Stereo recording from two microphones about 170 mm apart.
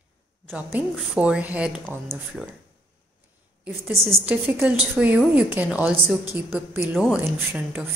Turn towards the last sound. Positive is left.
turn(degrees=-15)  # may be behind; listen again after turning